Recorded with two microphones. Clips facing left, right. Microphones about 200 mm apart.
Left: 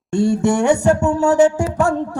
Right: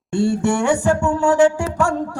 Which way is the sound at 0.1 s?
40° left (ahead or behind).